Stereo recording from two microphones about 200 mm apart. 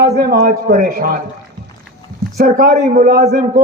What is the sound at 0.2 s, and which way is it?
A man's voice, 50° right (ahead or behind).